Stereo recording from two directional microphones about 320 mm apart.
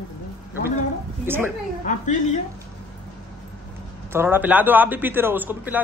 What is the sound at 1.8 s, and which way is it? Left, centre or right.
Speech, left.